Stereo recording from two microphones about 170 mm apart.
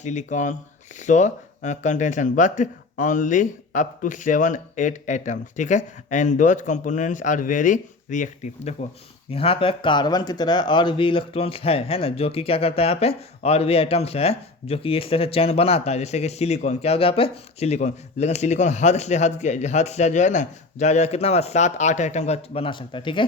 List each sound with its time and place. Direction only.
0.0 s a man's voice: 45° left (ahead or behind)
9.3 s speech: 35° left (ahead or behind)